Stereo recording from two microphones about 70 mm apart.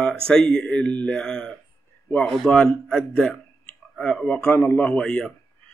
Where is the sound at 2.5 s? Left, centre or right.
Centre.